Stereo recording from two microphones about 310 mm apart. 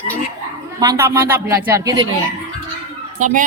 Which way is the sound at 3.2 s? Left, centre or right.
Right.